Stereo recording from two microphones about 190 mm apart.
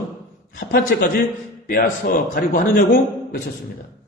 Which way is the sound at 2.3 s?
45° left (ahead or behind).